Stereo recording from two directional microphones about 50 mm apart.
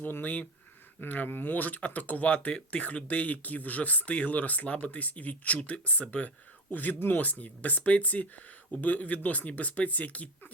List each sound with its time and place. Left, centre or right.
0.1 s speech: left